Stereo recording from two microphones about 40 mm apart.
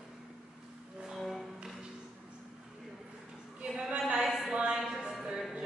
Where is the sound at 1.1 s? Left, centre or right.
Centre.